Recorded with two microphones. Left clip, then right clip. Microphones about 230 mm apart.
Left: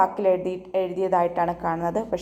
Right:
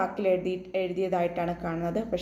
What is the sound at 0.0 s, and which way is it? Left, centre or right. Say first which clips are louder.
A woman's voice: left 6 dB; centre.